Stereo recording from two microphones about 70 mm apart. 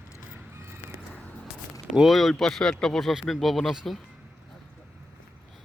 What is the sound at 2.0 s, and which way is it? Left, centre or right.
Speech, centre.